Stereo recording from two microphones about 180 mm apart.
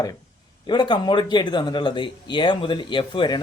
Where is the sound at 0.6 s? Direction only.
25° left (ahead or behind).